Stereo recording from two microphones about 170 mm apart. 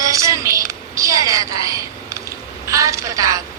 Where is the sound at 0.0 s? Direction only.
20° right (ahead or behind).